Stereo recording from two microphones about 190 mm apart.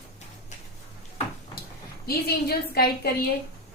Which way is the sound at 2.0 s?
55° left (ahead or behind).